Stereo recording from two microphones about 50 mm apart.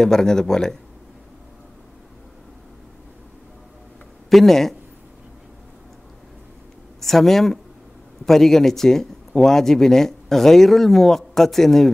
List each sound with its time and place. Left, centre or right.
0.0 s a man's voice: centre
4.3 s speech: centre
7.0 s a man's voice: centre